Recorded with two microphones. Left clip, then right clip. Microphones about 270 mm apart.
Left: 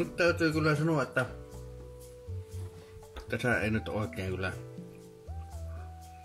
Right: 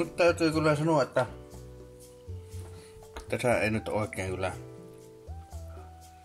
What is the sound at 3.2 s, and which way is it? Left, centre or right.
Speech, centre.